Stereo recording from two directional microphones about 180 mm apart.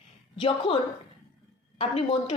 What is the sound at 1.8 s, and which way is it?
Speech, 30° left (ahead or behind).